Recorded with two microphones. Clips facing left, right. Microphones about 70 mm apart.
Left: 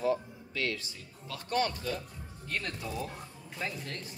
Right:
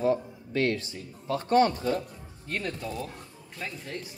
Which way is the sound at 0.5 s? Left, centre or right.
Right.